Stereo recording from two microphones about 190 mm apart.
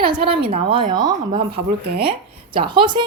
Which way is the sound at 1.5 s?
55° right (ahead or behind).